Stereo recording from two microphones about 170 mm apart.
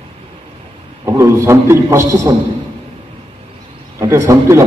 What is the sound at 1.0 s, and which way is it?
A man's voice, 15° right (ahead or behind).